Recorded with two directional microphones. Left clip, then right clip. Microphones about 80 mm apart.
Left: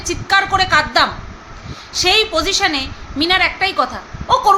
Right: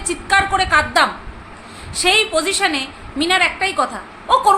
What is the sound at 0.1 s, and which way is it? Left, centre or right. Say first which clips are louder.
A woman's voice: left 1 dB; centre.